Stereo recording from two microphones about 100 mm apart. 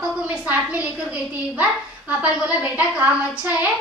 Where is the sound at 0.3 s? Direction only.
15° right (ahead or behind).